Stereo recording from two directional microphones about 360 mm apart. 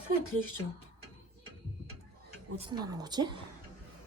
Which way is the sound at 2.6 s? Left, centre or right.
Centre.